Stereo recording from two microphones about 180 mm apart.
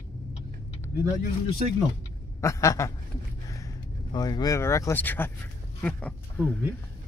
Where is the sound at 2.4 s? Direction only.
15° left (ahead or behind).